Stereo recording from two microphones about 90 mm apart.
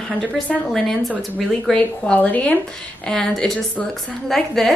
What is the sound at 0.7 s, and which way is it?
Speech, centre (ahead or behind).